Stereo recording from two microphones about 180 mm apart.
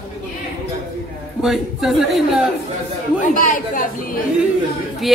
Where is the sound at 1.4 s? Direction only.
Centre (ahead or behind).